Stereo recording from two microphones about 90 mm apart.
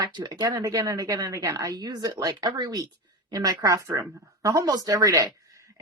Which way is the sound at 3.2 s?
40° right (ahead or behind).